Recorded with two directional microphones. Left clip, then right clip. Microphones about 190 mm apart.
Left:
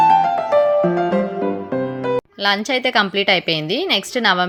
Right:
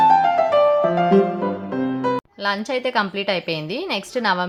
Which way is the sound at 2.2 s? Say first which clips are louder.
Left 5 dB; 20° left (ahead or behind).